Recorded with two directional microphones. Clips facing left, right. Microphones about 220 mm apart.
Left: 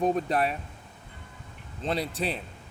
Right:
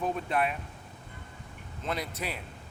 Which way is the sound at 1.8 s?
30° left (ahead or behind).